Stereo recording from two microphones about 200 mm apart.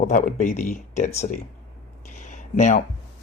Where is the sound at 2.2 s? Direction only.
40° left (ahead or behind).